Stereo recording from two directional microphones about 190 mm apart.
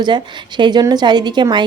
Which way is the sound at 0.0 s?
25° right (ahead or behind).